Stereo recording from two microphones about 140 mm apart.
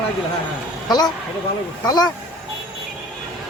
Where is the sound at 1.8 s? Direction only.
30° left (ahead or behind).